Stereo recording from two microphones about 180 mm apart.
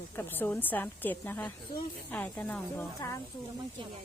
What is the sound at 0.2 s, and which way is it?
A woman's voice, 10° left (ahead or behind).